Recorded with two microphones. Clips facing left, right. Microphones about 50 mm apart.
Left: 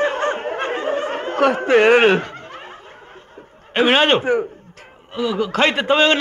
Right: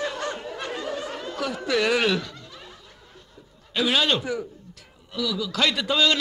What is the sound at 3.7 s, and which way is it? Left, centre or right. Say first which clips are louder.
A man's voice: left 8 dB; left.